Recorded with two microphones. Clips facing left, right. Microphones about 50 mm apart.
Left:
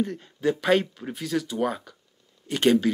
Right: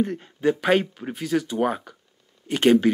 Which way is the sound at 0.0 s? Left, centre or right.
Right.